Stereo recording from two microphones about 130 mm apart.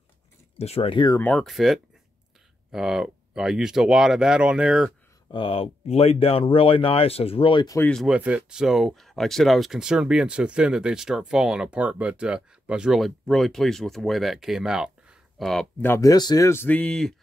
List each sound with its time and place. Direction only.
0.6 s speech: 50° left (ahead or behind)
1.2 s speech: 10° left (ahead or behind)
1.5 s speech: centre (ahead or behind)
5.3 s speech: 45° left (ahead or behind)
7.8 s speech: 5° left (ahead or behind)
8.1 s speech: 10° right (ahead or behind)
15.8 s speech: 15° left (ahead or behind)
16.1 s speech: 30° left (ahead or behind)
16.4 s speech: 15° left (ahead or behind)